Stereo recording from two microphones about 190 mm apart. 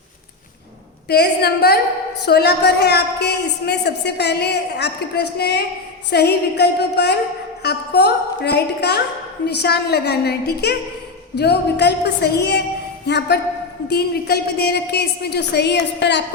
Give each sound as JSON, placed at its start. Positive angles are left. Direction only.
{"t": 1.0, "sound": "a woman's voice", "side_deg": 60}